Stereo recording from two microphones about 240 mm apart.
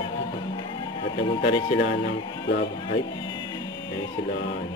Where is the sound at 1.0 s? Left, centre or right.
Left.